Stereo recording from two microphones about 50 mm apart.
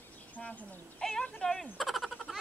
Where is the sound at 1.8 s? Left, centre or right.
Centre.